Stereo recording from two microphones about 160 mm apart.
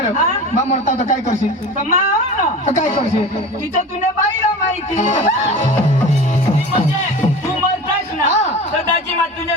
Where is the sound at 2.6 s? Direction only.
45° left (ahead or behind).